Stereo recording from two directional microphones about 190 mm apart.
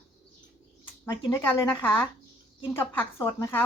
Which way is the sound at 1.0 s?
20° left (ahead or behind).